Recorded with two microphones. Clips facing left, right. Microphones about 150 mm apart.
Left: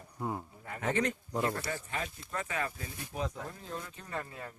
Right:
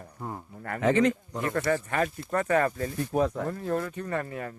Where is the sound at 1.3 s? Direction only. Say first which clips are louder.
Right 1 dB; 5° left (ahead or behind).